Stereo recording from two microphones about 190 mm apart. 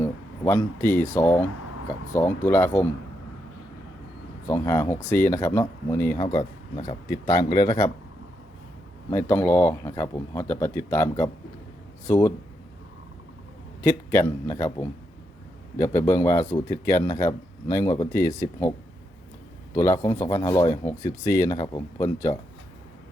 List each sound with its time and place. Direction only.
0.0 s a sound: 15° left (ahead or behind)
1.1 s speech: 10° left (ahead or behind)
4.4 s speech: 15° left (ahead or behind)
9.0 s speech: 15° left (ahead or behind)
13.8 s speech: 15° left (ahead or behind)
19.7 s speech: 15° left (ahead or behind)